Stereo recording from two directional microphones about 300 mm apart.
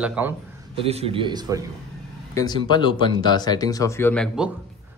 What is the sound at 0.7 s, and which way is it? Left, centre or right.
Speech, centre.